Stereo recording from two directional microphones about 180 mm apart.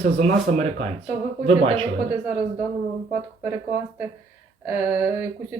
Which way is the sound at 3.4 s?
15° right (ahead or behind).